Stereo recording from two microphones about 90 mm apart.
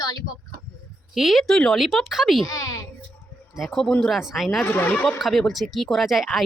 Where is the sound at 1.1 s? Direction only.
5° right (ahead or behind).